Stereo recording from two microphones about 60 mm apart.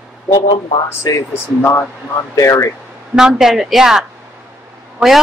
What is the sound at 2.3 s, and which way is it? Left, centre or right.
Speech, left.